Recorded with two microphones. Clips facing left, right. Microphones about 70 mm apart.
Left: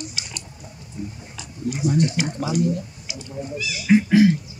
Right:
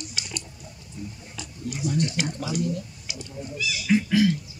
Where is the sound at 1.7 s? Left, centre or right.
Left.